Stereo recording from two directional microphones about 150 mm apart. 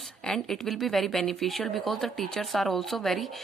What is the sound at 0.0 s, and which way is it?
Speech, 5° left (ahead or behind).